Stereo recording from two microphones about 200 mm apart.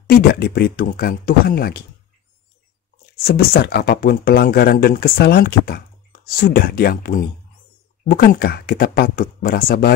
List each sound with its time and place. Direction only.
0.0 s speech: 50° left (ahead or behind)
3.3 s speech: 50° left (ahead or behind)